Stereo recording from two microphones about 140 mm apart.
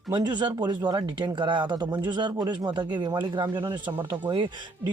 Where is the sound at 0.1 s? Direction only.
30° right (ahead or behind).